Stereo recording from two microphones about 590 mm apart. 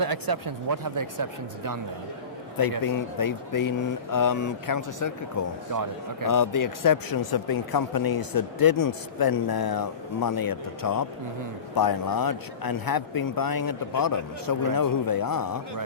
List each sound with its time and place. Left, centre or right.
0.0 s speech: right
2.8 s speech: left
5.7 s speech: right
6.2 s speech: left